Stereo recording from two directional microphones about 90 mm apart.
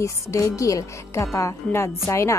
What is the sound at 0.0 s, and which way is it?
A woman's voice, 35° left (ahead or behind).